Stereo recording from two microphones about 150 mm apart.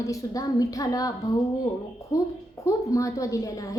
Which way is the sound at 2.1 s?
25° left (ahead or behind).